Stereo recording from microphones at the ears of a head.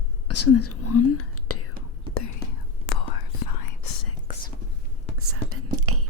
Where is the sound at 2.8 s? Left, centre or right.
Left.